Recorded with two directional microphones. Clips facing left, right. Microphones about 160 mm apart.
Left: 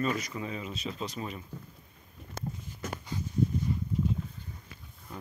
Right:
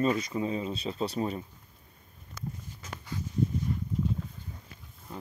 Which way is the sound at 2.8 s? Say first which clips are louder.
Left 7 dB; 60° left (ahead or behind).